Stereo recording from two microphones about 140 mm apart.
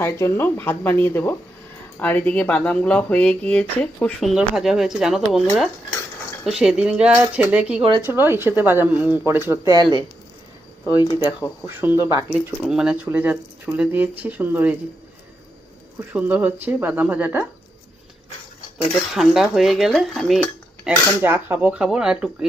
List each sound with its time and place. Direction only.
0.0 s speech: 20° left (ahead or behind); by 5.4 s centre (ahead or behind)
6.4 s speech: 5° right (ahead or behind)
9.7 s speech: 35° right (ahead or behind)
10.8 s speech: 30° left (ahead or behind)
11.6 s speech: 15° right (ahead or behind)
12.6 s speech: 5° right (ahead or behind)
16.0 s speech: 10° right (ahead or behind)
19.1 s speech: centre (ahead or behind)
21.2 s speech: 15° right (ahead or behind)